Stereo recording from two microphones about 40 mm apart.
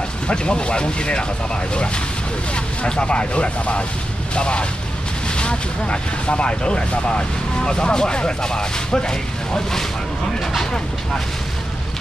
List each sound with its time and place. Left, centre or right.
0.3 s speech: left
2.5 s speech: left